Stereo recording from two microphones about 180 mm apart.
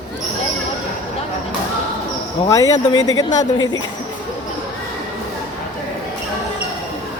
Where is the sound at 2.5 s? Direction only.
20° left (ahead or behind).